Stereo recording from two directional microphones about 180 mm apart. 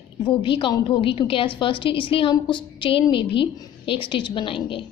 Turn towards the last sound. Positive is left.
turn(degrees=30)  # may be behind; listen again after turning